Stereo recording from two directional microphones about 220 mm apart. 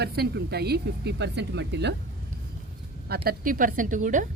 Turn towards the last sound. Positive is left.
turn(degrees=-35)  # may be behind; listen again after turning